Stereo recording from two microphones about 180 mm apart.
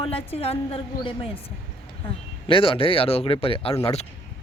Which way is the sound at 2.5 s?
30° left (ahead or behind).